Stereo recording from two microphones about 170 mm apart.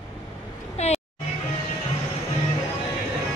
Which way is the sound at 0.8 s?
40° left (ahead or behind).